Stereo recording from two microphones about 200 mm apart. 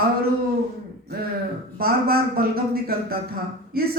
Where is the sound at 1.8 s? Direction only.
50° right (ahead or behind).